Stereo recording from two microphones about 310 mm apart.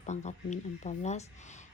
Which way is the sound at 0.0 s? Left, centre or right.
Left.